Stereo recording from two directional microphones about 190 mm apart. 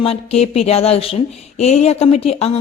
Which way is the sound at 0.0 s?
30° left (ahead or behind).